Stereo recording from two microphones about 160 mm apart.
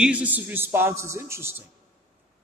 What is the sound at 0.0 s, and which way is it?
A man's voice, 10° right (ahead or behind).